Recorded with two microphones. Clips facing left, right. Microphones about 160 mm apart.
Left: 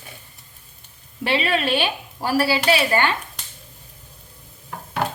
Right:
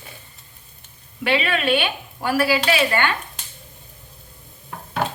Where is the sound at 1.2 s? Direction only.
35° left (ahead or behind).